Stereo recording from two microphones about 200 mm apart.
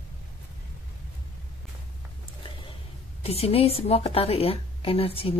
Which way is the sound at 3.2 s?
30° left (ahead or behind).